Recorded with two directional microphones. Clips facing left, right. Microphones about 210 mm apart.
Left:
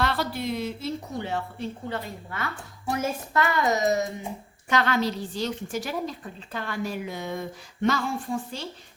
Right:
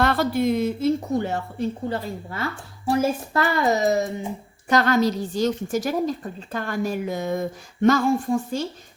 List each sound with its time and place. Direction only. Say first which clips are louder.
0.0 s a woman's voice: right 7 dB; 50° right (ahead or behind); by 4.0 s 30° right (ahead or behind)
4.7 s a woman's voice: right 5 dB; 40° right (ahead or behind)